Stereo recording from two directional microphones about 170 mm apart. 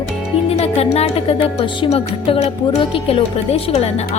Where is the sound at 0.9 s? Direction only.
35° left (ahead or behind).